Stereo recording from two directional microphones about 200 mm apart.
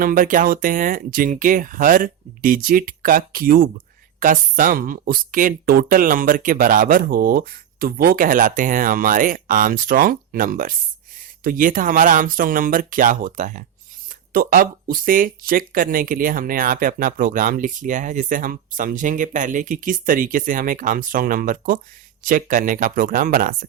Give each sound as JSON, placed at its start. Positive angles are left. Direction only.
{"t": 0.0, "sound": "speech", "side_deg": -45}